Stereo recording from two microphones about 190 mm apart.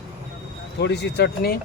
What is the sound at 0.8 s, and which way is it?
Speech, 65° left (ahead or behind).